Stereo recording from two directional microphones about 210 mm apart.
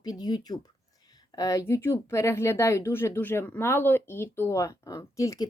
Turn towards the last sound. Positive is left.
turn(degrees=15)  # may be behind; listen again after turning